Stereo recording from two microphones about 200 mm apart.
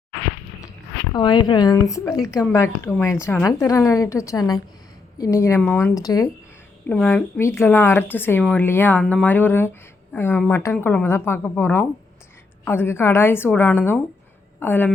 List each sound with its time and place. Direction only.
1.1 s a woman's voice: 20° left (ahead or behind)